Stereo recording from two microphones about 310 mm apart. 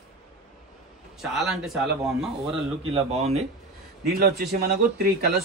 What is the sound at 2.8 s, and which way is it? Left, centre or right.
A man's voice, centre.